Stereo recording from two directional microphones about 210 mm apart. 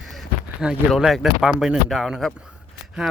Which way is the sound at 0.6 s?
Centre (ahead or behind).